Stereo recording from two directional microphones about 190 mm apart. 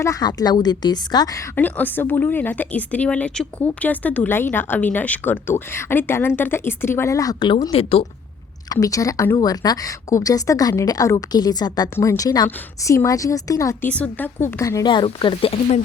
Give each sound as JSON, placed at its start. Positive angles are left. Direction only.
{"t": 0.0, "sound": "a woman's voice", "side_deg": 20}
{"t": 8.7, "sound": "a woman's voice", "side_deg": 15}